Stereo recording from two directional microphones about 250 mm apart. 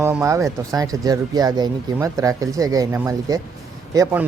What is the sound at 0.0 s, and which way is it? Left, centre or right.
Speech, centre.